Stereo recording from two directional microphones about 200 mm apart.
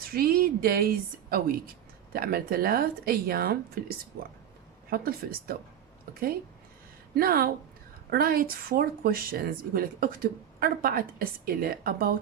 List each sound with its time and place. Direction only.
0.0 s speech: 50° right (ahead or behind)